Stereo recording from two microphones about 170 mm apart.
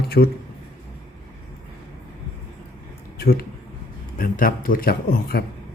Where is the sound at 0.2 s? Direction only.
60° left (ahead or behind).